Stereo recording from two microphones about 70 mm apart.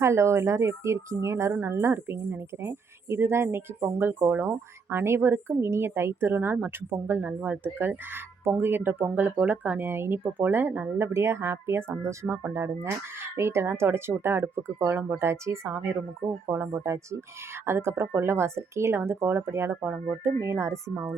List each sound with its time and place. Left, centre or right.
0.0 s a woman's voice: right
16.5 s a woman's voice: right